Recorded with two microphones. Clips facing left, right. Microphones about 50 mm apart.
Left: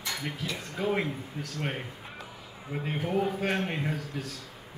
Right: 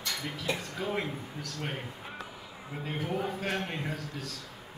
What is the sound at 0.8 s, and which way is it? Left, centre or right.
Speech, centre.